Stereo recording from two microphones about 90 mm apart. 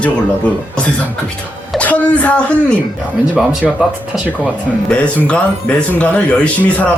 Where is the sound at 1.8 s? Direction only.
15° left (ahead or behind).